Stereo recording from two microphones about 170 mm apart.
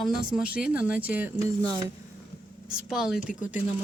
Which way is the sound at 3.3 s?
50° left (ahead or behind).